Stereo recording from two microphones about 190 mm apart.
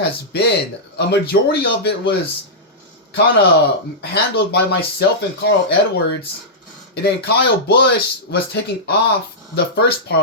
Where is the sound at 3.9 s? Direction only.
60° left (ahead or behind).